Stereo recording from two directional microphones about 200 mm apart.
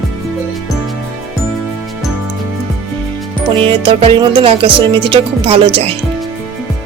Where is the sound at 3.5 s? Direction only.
25° right (ahead or behind).